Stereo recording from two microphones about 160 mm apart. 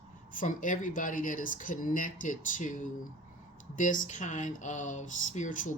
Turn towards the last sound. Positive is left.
turn(degrees=55)  # may be behind; listen again after turning